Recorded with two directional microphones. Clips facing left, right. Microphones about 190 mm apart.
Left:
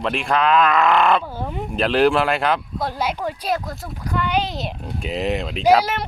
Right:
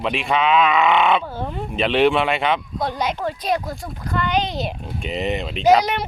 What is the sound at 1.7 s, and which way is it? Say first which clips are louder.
Speech: even; centre (ahead or behind).